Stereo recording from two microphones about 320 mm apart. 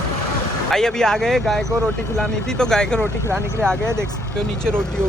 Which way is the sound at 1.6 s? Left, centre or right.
Centre.